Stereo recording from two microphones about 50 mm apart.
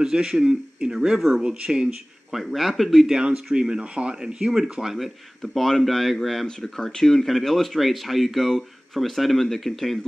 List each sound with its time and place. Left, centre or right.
0.0 s speech: centre
2.3 s speech: centre
3.1 s speech: centre
4.9 s speech: centre